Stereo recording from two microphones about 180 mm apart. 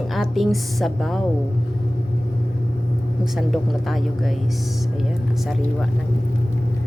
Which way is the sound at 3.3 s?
Centre (ahead or behind).